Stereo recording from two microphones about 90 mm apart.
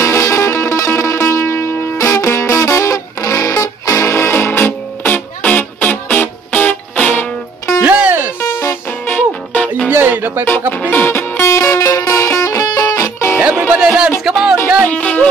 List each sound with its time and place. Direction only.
0.0 s music: 30° left (ahead or behind)
7.8 s music: 15° right (ahead or behind)
8.4 s music: 30° left (ahead or behind)
9.8 s music: 20° right (ahead or behind)
10.8 s music: 20° left (ahead or behind)
13.4 s music: 10° right (ahead or behind)
14.9 s music: 15° left (ahead or behind)